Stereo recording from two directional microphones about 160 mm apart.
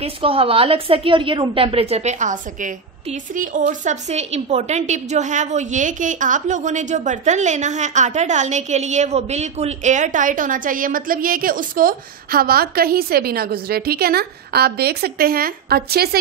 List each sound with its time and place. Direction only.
0.0 s a woman's voice: 35° right (ahead or behind); by 16.2 s 75° right (ahead or behind)